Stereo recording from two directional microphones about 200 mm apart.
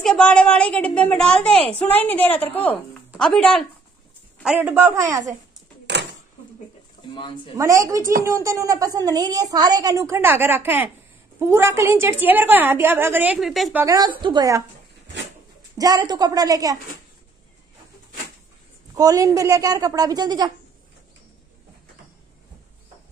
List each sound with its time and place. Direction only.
0.0 s a woman's voice: 5° left (ahead or behind)
4.6 s a woman's voice: 10° right (ahead or behind)
5.9 s a sound: 60° right (ahead or behind)
7.5 s a woman's voice: 15° right (ahead or behind)
13.8 s a woman's voice: 20° right (ahead or behind)
15.8 s a woman's voice: 20° right (ahead or behind)
18.9 s a woman's voice: 15° right (ahead or behind)